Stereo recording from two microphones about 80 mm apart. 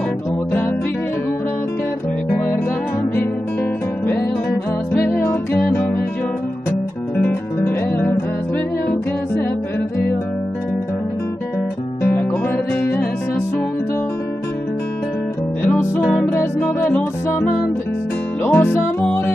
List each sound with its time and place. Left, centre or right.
4.9 s music: left
7.2 s music: left
12.0 s music: left
18.4 s music: left